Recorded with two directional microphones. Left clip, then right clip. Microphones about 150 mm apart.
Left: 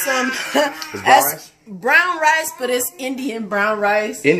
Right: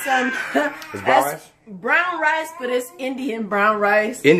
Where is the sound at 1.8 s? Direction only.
90° left.